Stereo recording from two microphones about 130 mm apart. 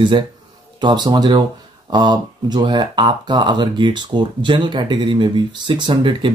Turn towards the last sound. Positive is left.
turn(degrees=-40)  # may be behind; listen again after turning